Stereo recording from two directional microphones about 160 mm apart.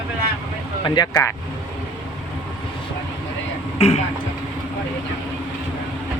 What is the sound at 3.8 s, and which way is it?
Speech, 40° left (ahead or behind).